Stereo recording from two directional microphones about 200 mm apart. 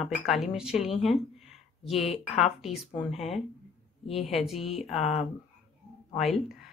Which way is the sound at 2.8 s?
Centre (ahead or behind).